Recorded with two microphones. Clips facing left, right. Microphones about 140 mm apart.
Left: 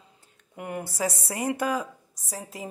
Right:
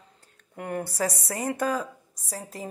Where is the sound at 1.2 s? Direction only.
20° left (ahead or behind).